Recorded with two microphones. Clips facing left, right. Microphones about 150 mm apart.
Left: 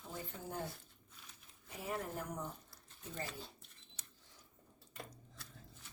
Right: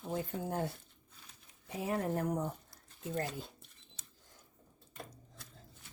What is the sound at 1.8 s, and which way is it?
Speech, 75° right (ahead or behind).